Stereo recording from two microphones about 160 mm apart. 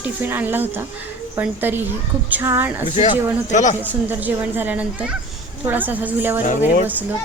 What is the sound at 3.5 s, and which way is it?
Speech, 50° left (ahead or behind).